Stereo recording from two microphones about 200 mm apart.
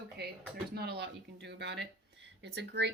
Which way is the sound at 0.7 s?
55° right (ahead or behind).